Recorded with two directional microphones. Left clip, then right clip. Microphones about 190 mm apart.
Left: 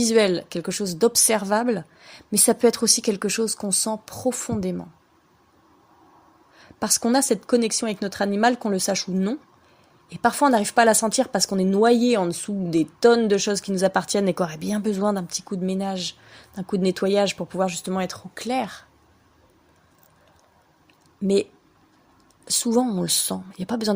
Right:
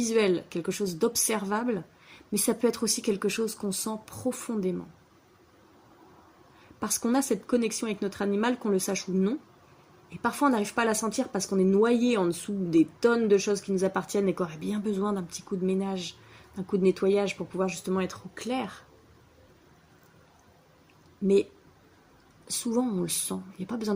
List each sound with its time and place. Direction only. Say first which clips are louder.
0.0 s speech: left 6 dB; 50° left (ahead or behind)
6.7 s speech: left 7 dB; 50° left (ahead or behind)
21.2 s speech: left 2 dB; 50° left (ahead or behind)
22.4 s speech: left 8 dB; 50° left (ahead or behind)